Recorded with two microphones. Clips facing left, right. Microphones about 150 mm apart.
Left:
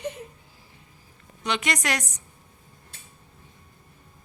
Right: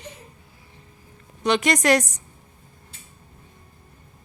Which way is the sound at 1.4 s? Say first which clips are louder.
Right 7 dB; 40° right (ahead or behind).